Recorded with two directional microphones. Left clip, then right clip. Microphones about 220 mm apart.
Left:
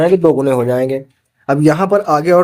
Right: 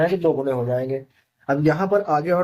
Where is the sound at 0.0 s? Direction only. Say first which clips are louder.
Left 9 dB; 45° left (ahead or behind).